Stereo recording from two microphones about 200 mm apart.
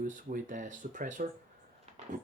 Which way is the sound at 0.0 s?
40° right (ahead or behind).